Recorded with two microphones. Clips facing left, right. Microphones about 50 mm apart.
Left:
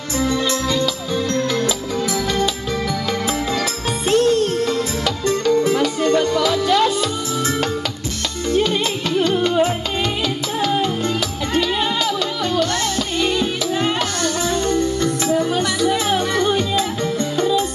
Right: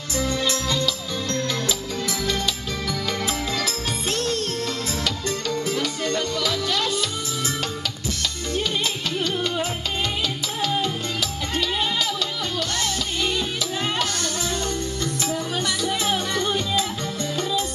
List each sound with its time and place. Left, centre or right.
0.2 s music: left
9.2 s music: left
13.2 s music: left
15.5 s music: left